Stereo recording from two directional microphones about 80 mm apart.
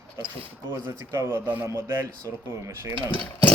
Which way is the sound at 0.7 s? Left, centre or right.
Right.